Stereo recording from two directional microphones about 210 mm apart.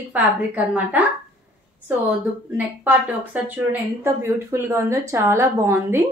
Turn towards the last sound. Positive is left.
turn(degrees=-15)  # may be behind; listen again after turning